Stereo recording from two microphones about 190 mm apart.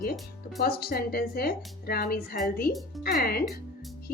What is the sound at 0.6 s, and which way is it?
A woman's voice, 55° left (ahead or behind).